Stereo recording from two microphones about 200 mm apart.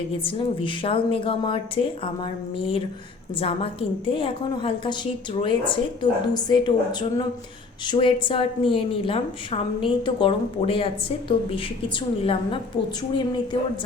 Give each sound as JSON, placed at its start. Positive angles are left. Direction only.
{"t": 0.3, "sound": "a woman's voice", "side_deg": 25}
{"t": 7.9, "sound": "a woman's voice", "side_deg": 25}